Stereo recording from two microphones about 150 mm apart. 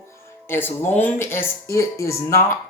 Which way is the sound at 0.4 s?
15° left (ahead or behind).